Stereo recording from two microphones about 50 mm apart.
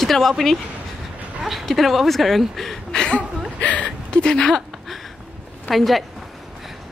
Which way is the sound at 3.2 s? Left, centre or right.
Left.